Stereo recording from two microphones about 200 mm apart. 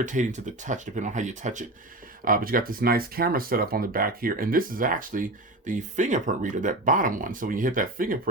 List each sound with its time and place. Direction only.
0.0 s speech: 40° right (ahead or behind)